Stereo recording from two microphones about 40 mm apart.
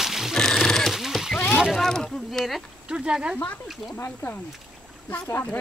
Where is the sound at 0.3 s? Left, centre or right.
Centre.